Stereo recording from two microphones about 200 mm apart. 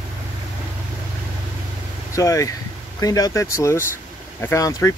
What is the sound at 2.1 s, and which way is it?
Speech, 15° left (ahead or behind).